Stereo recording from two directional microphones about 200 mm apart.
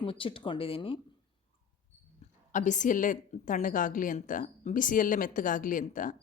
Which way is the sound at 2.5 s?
40° left (ahead or behind).